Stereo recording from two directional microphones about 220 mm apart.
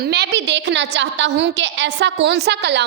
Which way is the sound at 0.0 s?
45° right (ahead or behind).